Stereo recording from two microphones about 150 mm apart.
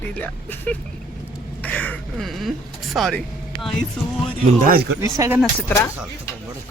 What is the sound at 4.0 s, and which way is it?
Speech, 5° left (ahead or behind).